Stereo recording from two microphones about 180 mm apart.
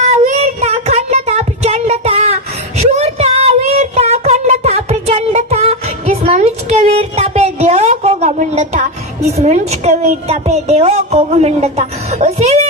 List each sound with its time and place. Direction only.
0.0 s child singing: 40° right (ahead or behind)
9.3 s a woman's voice: 35° right (ahead or behind)